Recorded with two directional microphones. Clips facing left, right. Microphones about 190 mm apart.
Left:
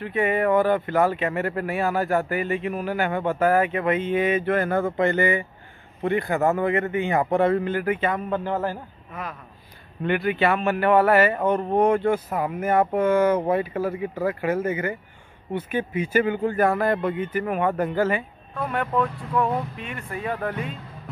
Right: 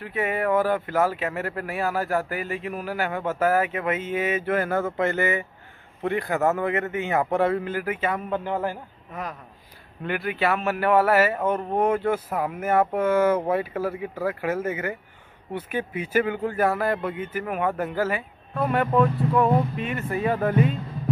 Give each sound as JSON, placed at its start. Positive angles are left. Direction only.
{"t": 0.0, "sound": "a man's voice", "side_deg": -5}
{"t": 9.1, "sound": "speech", "side_deg": -40}
{"t": 10.0, "sound": "speech", "side_deg": 0}